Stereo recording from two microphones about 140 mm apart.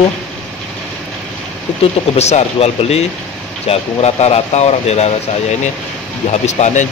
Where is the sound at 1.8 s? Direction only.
50° left (ahead or behind).